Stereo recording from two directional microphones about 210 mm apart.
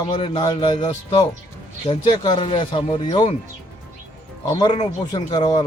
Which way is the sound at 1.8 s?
25° left (ahead or behind).